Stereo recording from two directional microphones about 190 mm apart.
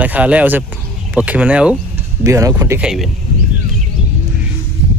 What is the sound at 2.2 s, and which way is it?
Speech, 15° right (ahead or behind).